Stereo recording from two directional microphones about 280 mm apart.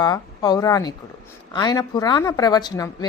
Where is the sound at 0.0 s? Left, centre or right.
Centre.